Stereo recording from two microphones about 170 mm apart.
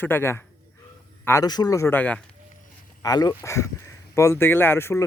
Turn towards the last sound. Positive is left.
turn(degrees=15)  # may be behind; listen again after turning